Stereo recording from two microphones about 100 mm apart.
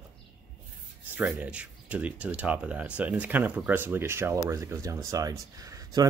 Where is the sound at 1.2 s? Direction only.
15° right (ahead or behind).